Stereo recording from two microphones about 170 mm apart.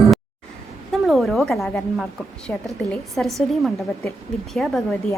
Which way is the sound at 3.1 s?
Centre (ahead or behind).